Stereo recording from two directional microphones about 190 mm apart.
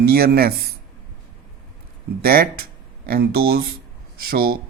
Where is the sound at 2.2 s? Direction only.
50° right (ahead or behind).